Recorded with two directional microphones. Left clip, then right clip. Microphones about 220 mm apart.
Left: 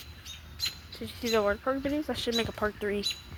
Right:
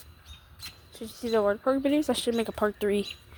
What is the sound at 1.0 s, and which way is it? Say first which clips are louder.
Speech: right 2 dB; 25° right (ahead or behind).